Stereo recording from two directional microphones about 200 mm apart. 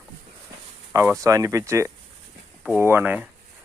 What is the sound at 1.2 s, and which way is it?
Speech, 15° right (ahead or behind).